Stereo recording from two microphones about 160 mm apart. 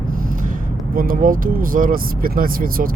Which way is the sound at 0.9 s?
65° right (ahead or behind).